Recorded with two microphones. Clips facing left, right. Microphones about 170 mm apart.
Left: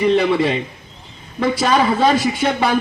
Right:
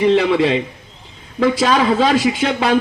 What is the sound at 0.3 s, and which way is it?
Speech, 90° right.